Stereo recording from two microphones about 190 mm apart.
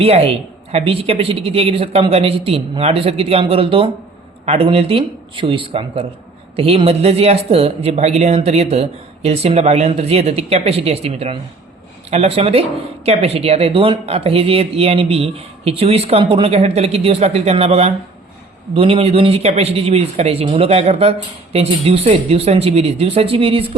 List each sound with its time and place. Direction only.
0.0 s speech: 30° right (ahead or behind)